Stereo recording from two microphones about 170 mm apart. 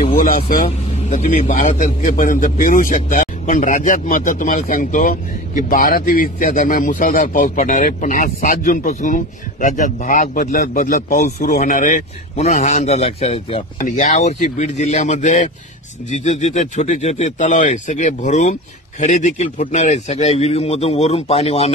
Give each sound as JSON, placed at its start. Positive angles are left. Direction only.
{"t": 0.1, "sound": "vehicle", "side_deg": 55}
{"t": 0.7, "sound": "a man's voice", "side_deg": 40}
{"t": 13.7, "sound": "a man's voice", "side_deg": 45}